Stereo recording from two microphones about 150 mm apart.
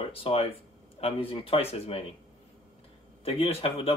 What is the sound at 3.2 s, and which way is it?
Speech, 40° left (ahead or behind).